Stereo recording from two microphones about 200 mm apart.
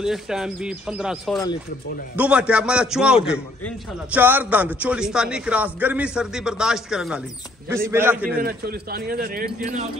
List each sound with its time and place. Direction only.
0.0 s a man's voice: 5° right (ahead or behind)
8.4 s speech: 50° right (ahead or behind)